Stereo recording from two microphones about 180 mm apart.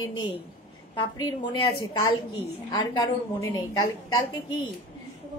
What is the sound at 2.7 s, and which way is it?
Speech, 20° left (ahead or behind).